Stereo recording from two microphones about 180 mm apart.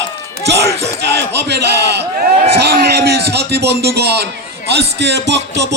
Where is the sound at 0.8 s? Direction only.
70° right (ahead or behind).